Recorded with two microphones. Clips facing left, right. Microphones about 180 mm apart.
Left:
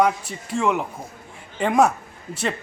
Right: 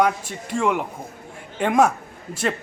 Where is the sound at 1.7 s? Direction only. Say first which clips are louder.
Even; 5° left (ahead or behind).